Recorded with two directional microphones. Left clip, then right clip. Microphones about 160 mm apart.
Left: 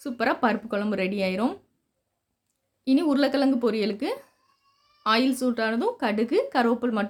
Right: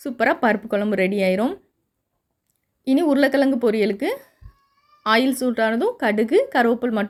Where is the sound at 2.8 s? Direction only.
25° right (ahead or behind).